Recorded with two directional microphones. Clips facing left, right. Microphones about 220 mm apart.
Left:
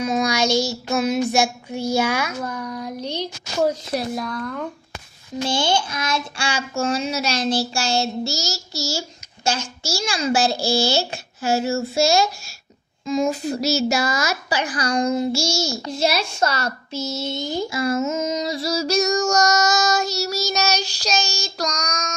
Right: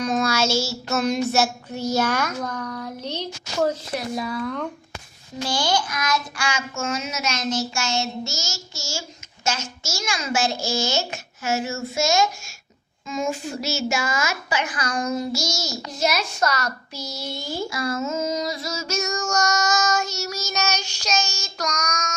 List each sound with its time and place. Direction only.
0.2 s child singing: 15° left (ahead or behind)
4.1 s speech: 5° right (ahead or behind)
5.4 s a woman's voice: 25° left (ahead or behind)